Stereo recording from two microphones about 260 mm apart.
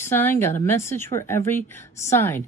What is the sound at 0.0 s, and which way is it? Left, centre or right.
A woman's voice, centre.